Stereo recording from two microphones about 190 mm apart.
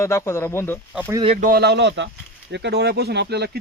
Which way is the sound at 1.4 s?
55° right (ahead or behind).